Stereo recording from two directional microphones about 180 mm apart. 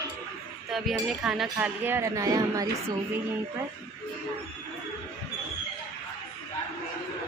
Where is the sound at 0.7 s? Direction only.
Centre (ahead or behind); by 2.6 s 20° right (ahead or behind).